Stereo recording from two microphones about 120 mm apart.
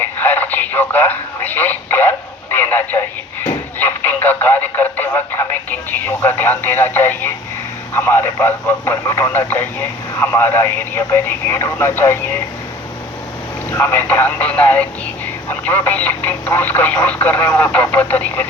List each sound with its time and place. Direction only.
0.0 s radio: 15° left (ahead or behind)
6.2 s speech: 15° left (ahead or behind)
13.7 s speech: 15° left (ahead or behind)